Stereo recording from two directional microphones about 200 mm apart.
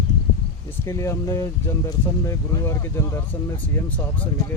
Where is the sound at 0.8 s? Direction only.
15° left (ahead or behind).